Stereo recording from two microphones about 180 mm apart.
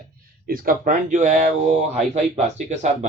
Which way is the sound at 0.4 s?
55° right (ahead or behind).